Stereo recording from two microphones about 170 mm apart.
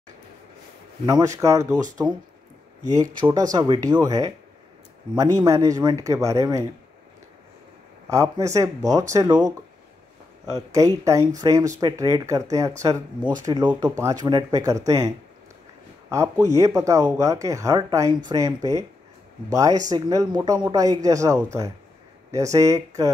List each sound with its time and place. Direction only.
1.0 s speech: 20° right (ahead or behind)
2.9 s speech: 25° right (ahead or behind)
8.1 s speech: 20° right (ahead or behind)
16.1 s speech: 20° right (ahead or behind)